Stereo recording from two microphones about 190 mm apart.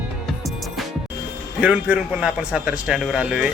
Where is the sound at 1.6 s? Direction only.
5° right (ahead or behind).